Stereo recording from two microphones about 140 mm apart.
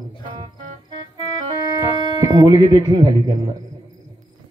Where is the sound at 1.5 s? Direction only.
30° right (ahead or behind).